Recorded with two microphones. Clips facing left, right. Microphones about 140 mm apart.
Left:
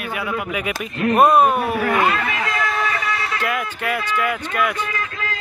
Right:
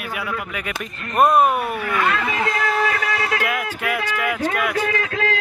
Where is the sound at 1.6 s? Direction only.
40° left (ahead or behind).